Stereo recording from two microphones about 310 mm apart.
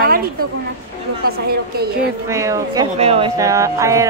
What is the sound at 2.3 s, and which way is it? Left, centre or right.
A woman's voice, centre.